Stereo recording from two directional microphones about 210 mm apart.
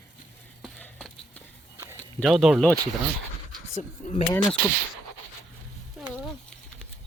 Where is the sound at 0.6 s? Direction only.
Centre (ahead or behind).